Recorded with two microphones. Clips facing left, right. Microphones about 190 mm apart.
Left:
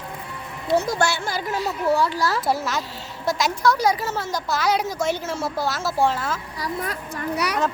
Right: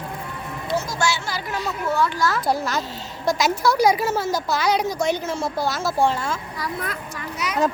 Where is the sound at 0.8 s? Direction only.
60° left (ahead or behind).